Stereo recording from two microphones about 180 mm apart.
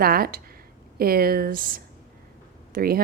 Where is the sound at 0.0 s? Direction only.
55° right (ahead or behind).